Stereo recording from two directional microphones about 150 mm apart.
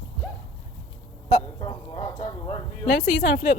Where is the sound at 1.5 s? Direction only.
35° left (ahead or behind).